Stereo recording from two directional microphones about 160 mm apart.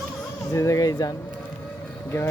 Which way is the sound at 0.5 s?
20° left (ahead or behind).